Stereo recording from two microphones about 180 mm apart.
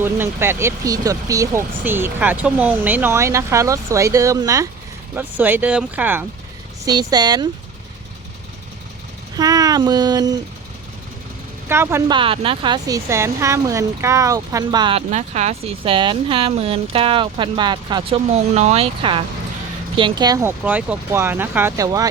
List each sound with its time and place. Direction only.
0.0 s speech: 15° right (ahead or behind)
6.8 s speech: 20° right (ahead or behind)
9.3 s speech: 20° right (ahead or behind)
11.7 s speech: 15° right (ahead or behind)
12.1 s speech: 30° right (ahead or behind)
15.1 s speech: 40° right (ahead or behind); by 22.1 s 20° right (ahead or behind)